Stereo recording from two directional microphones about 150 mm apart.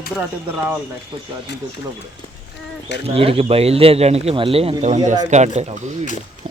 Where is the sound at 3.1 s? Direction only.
40° right (ahead or behind).